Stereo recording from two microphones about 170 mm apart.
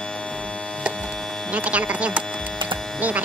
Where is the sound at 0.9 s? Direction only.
5° left (ahead or behind).